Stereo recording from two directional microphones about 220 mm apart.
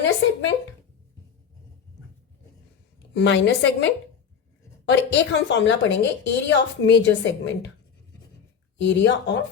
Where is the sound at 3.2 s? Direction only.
50° left (ahead or behind).